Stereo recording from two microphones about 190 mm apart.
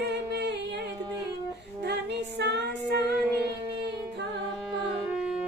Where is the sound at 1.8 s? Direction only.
65° right (ahead or behind).